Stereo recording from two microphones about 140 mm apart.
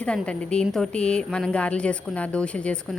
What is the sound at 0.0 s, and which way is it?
A woman's voice, 5° left (ahead or behind).